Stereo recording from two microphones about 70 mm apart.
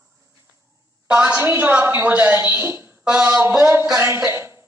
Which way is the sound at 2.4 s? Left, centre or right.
Right.